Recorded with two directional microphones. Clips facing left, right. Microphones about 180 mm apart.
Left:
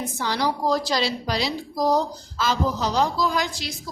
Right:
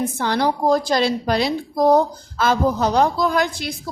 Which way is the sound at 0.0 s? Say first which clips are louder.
Right 5 dB; 55° right (ahead or behind).